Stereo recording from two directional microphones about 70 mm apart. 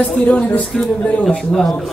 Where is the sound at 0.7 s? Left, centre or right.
Centre.